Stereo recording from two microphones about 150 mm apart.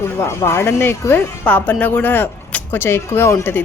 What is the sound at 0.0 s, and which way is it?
Speech, 15° left (ahead or behind).